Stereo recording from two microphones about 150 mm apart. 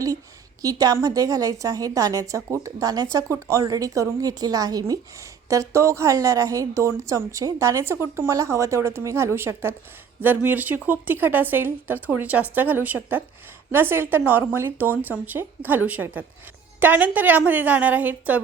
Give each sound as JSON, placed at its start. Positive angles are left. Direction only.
{"t": 0.6, "sound": "a woman's voice", "side_deg": -25}